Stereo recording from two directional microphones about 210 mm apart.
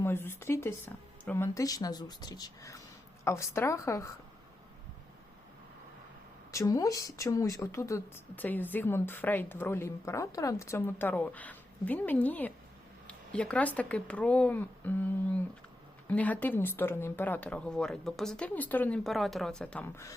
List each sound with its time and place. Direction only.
0.0 s speech: 10° left (ahead or behind)
6.5 s speech: 15° left (ahead or behind)
16.0 s speech: 5° left (ahead or behind)